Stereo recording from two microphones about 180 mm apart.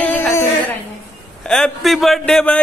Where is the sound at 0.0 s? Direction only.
10° left (ahead or behind).